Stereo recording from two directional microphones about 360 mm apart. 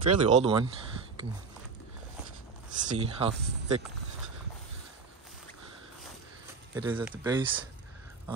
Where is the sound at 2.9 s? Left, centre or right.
Centre.